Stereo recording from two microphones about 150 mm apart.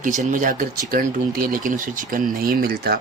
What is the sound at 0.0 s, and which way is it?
Speech, 60° right (ahead or behind).